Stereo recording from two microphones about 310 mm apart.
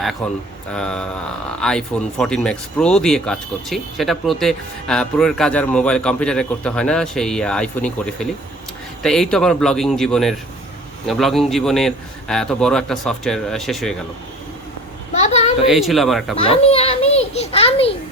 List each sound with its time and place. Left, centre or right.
0.2 s speech: centre
15.1 s a sound: left
15.6 s speech: centre
16.3 s a child's voice: centre